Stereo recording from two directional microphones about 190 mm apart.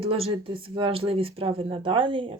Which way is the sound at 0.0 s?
30° right (ahead or behind).